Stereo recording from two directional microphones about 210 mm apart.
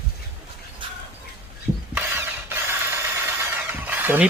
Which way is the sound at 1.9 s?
10° right (ahead or behind).